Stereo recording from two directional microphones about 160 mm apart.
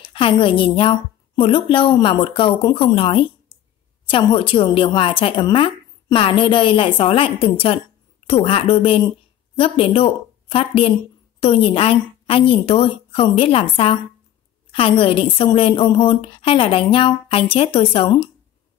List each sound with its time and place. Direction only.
0.1 s a woman's voice: 30° left (ahead or behind)